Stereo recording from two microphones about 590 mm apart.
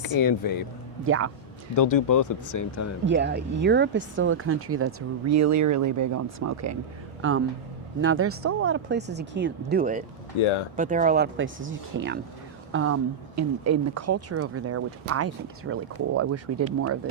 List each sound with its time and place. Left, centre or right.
0.0 s speech: left
1.0 s speech: right
1.7 s speech: left
3.1 s speech: centre
10.3 s speech: left
10.8 s speech: centre